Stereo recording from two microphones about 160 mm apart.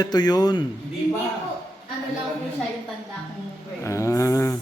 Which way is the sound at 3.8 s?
20° left (ahead or behind).